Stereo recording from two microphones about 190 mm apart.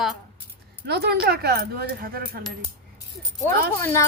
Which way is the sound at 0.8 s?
60° right (ahead or behind).